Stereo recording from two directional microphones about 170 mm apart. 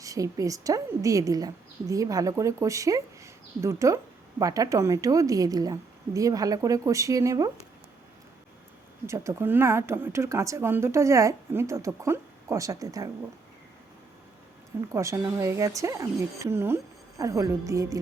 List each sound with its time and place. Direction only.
0.0 s a woman's voice: 20° right (ahead or behind)
9.0 s speech: 15° right (ahead or behind)
14.8 s speech: 15° right (ahead or behind)